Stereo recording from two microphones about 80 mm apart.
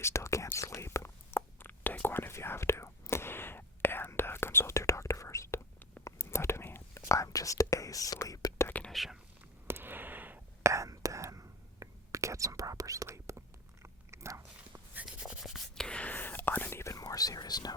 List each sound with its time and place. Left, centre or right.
0.0 s speech: left
0.5 s whispering: left
8.9 s speech: centre
9.6 s a sound: right
10.6 s whispering: right
13.8 s cat: right
15.0 s whispering: centre; by 16.8 s left
16.8 s whispering: left